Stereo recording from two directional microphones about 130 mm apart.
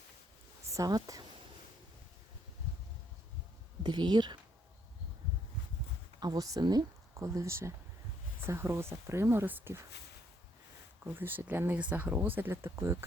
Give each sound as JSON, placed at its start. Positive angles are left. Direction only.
{"t": 0.7, "sound": "speech", "side_deg": -30}
{"t": 3.8, "sound": "speech", "side_deg": -35}
{"t": 6.1, "sound": "speech", "side_deg": -30}
{"t": 11.0, "sound": "speech", "side_deg": -15}